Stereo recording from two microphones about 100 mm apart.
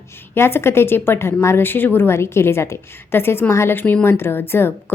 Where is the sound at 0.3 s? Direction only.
25° left (ahead or behind).